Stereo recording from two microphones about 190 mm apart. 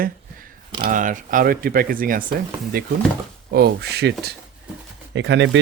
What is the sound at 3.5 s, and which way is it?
Speech, 60° right (ahead or behind).